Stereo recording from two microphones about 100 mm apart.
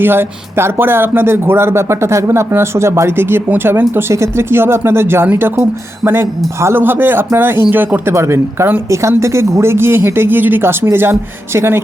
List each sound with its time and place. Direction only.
0.0 s speech: 20° right (ahead or behind)